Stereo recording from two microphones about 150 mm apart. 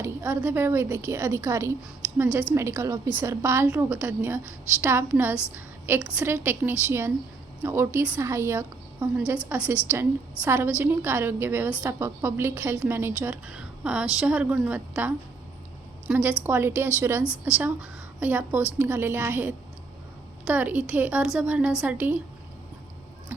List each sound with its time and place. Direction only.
0.0 s a woman's voice: 15° right (ahead or behind)